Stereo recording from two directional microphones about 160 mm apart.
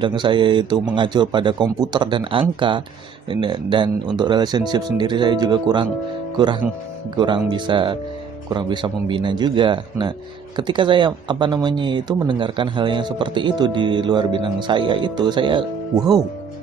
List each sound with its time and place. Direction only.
0.0 s a man's voice: 30° right (ahead or behind)